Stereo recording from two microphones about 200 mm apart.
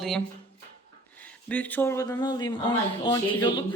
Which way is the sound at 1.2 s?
10° left (ahead or behind).